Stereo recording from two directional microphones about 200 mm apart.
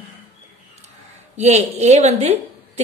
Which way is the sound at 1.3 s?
35° right (ahead or behind).